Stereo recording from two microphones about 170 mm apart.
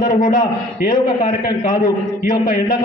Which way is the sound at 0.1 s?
55° left (ahead or behind).